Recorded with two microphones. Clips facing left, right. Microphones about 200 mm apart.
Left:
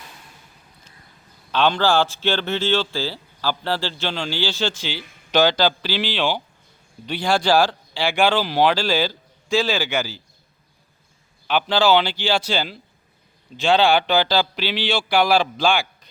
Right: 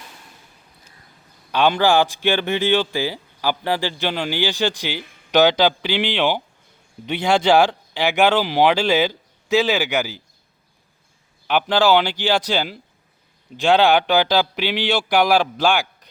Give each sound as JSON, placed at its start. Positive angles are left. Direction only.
{"t": 1.5, "sound": "speech", "side_deg": -15}
{"t": 11.4, "sound": "speech", "side_deg": -15}